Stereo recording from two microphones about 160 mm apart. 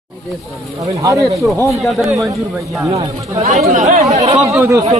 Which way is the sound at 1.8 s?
Centre (ahead or behind).